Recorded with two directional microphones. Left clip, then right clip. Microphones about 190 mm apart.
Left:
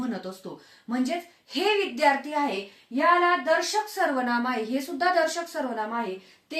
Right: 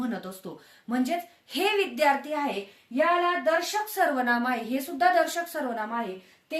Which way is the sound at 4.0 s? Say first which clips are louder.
Right 3 dB; 25° right (ahead or behind).